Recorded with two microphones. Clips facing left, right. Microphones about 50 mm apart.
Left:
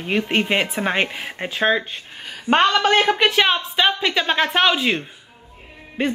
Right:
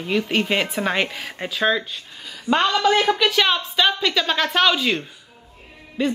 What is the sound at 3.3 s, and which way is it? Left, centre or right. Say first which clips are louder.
A woman's voice: left 1 dB; left.